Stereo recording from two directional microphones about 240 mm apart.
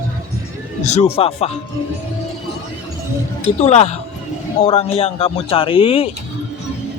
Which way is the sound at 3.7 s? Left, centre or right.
Left.